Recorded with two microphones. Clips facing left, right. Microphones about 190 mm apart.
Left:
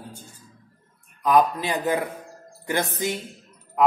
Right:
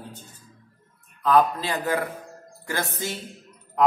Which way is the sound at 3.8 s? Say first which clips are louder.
Left 1 dB; 5° left (ahead or behind).